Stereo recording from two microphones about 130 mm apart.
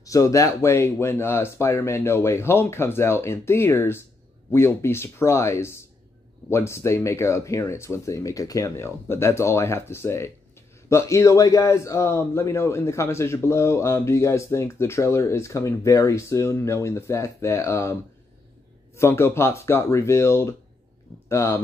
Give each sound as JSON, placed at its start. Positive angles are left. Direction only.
{"t": 0.0, "sound": "a man's voice", "side_deg": 25}
{"t": 18.9, "sound": "a man's voice", "side_deg": 20}